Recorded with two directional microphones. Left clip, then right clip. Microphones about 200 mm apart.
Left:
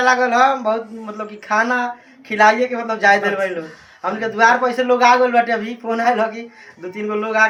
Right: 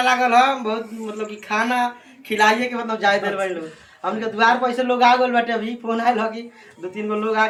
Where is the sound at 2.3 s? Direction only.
Centre (ahead or behind).